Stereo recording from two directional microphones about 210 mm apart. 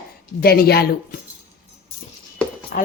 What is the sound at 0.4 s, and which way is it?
Speech, 45° left (ahead or behind).